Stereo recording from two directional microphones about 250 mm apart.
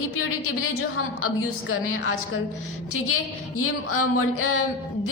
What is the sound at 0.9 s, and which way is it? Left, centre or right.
A woman's voice, left.